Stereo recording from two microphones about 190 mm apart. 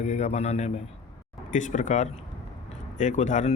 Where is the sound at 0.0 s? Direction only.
35° left (ahead or behind).